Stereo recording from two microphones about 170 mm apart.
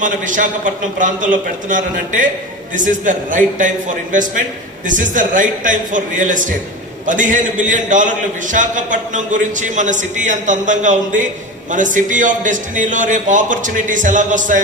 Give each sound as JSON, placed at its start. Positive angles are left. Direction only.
{"t": 0.0, "sound": "a man's voice", "side_deg": -50}